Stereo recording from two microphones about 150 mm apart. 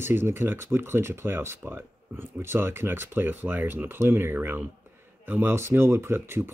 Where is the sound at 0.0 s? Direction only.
15° right (ahead or behind).